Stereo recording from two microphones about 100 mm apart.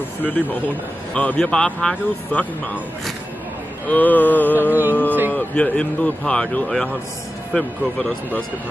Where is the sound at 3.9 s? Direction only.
15° left (ahead or behind).